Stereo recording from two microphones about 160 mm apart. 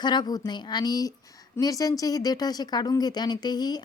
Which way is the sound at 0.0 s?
25° left (ahead or behind).